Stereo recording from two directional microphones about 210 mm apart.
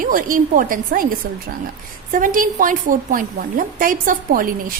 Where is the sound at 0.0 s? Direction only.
40° right (ahead or behind).